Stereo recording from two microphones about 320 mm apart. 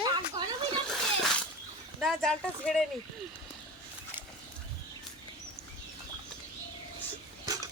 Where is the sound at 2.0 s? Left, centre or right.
Centre.